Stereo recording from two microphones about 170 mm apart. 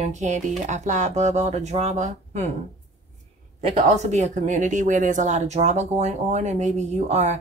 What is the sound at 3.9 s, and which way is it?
Speech, 40° right (ahead or behind).